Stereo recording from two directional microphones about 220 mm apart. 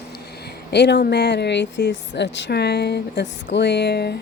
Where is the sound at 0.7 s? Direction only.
50° left (ahead or behind).